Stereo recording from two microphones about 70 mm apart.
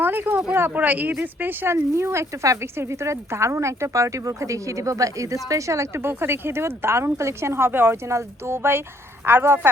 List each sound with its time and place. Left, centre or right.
0.0 s a sound: right
0.5 s speech: right
8.0 s speech: right